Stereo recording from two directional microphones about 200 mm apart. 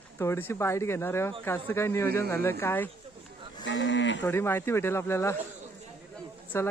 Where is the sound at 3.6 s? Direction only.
65° left (ahead or behind).